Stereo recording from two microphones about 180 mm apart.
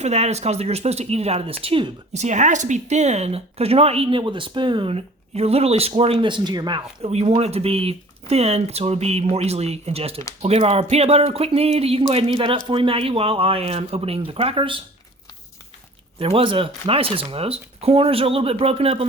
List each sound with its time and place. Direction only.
0.0 s speech: 35° right (ahead or behind)
16.1 s speech: 30° right (ahead or behind)